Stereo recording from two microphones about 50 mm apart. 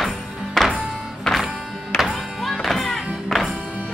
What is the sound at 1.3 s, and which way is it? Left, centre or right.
Music, left.